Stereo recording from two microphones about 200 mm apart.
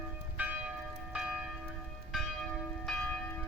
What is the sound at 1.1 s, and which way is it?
Church bell, centre (ahead or behind).